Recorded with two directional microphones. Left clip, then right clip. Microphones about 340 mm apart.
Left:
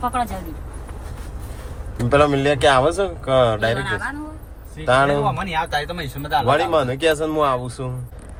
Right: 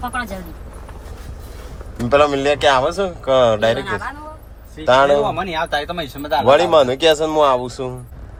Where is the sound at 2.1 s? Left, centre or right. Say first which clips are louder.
Right 2 dB; centre.